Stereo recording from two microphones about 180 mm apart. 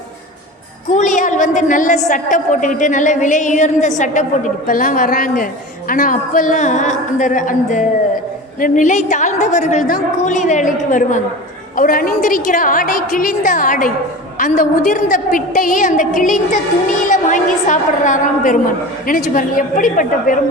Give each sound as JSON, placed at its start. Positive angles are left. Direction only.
{"t": 0.9, "sound": "a woman's voice", "side_deg": 45}